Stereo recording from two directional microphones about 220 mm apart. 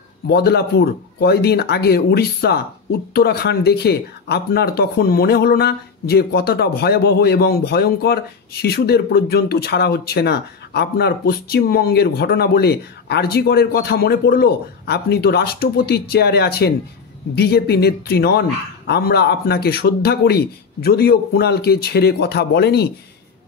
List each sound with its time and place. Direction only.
0.3 s speech: 45° left (ahead or behind)